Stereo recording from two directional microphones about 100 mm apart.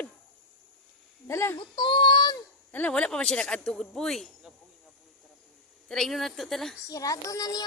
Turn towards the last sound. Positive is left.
turn(degrees=40)  # may be behind; listen again after turning